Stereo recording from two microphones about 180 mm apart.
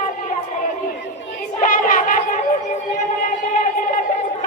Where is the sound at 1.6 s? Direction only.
50° left (ahead or behind).